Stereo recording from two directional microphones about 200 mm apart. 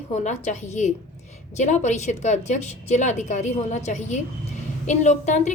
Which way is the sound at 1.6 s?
35° left (ahead or behind).